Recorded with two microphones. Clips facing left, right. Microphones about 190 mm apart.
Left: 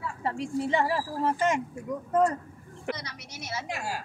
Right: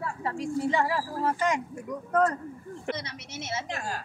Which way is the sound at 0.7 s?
20° left (ahead or behind).